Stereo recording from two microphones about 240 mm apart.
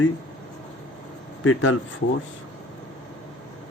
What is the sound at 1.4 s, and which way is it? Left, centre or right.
Speech, left.